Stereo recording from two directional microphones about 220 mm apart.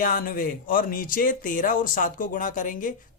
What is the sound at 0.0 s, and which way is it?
Speech, 40° left (ahead or behind).